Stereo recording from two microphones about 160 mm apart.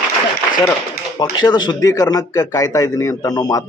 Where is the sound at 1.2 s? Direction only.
25° left (ahead or behind).